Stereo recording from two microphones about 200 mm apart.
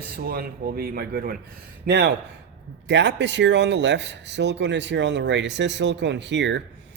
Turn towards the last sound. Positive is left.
turn(degrees=-65)  # may be behind; listen again after turning